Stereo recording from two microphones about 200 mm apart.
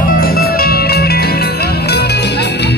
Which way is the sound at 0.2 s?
50° left (ahead or behind).